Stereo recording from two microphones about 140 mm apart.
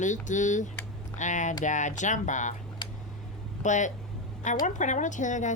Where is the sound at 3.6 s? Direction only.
60° left (ahead or behind).